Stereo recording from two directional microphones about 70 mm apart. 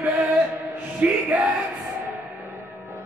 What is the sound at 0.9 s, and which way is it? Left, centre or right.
Music, right.